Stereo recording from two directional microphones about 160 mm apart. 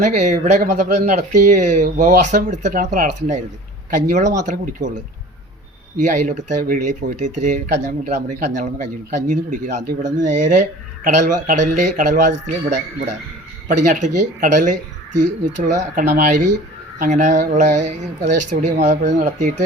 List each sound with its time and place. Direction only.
0.0 s speech: 50° right (ahead or behind)